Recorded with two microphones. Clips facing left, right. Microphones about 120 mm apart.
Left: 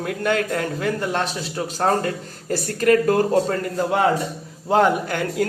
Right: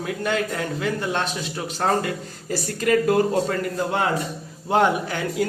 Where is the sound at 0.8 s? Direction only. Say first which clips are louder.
Right 1 dB; 40° left (ahead or behind).